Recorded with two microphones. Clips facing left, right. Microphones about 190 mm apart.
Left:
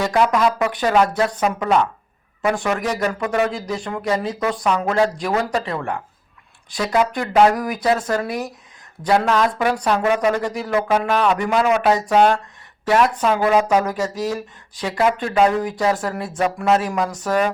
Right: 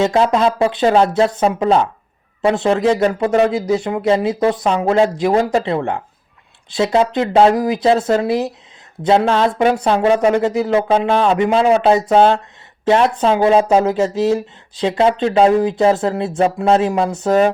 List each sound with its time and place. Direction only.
0.0 s speech: 25° right (ahead or behind)